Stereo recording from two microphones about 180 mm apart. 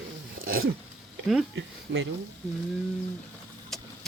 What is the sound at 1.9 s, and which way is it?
Speech, 80° right.